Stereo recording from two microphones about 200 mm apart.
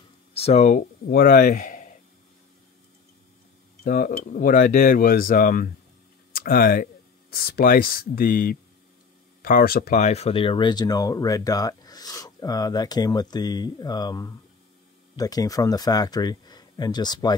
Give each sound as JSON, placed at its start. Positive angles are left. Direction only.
{"t": 0.3, "sound": "speech", "side_deg": 30}
{"t": 3.8, "sound": "speech", "side_deg": 45}